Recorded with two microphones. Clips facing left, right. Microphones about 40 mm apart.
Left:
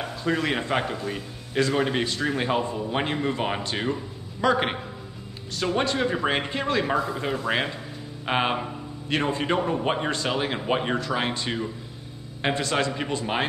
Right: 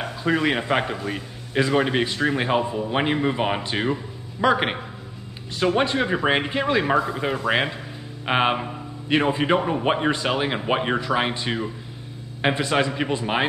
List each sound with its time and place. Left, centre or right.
0.0 s a man's voice: centre